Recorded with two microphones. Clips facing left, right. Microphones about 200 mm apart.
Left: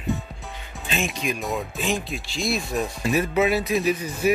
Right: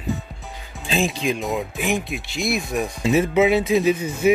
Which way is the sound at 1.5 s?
15° right (ahead or behind).